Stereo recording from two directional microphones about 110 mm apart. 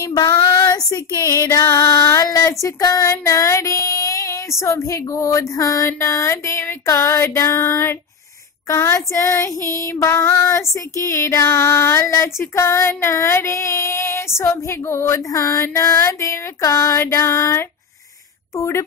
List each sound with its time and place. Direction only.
0.0 s female singing: 35° left (ahead or behind)
2.6 s speech: 30° left (ahead or behind)